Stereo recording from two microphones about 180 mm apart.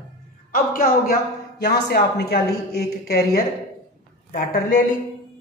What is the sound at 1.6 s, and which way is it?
A woman's voice, 65° left (ahead or behind).